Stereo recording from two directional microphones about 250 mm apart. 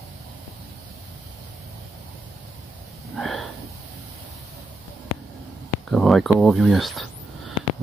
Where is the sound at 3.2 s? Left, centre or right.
Centre.